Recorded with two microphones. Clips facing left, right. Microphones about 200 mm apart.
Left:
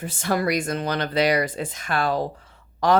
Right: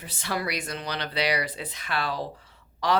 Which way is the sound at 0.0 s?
50° left (ahead or behind).